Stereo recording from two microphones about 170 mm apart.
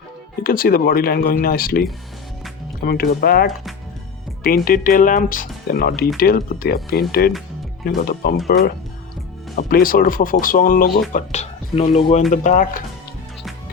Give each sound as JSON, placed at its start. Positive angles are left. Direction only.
{"t": 0.4, "sound": "speech", "side_deg": 60}
{"t": 9.6, "sound": "speech", "side_deg": 60}
{"t": 11.1, "sound": "speech", "side_deg": 40}
{"t": 12.3, "sound": "speech", "side_deg": 45}